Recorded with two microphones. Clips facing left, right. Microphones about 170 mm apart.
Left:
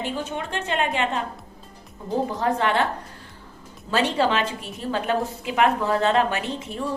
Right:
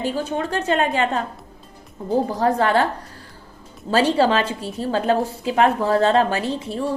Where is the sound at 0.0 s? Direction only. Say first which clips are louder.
Right 5 dB; 35° right (ahead or behind).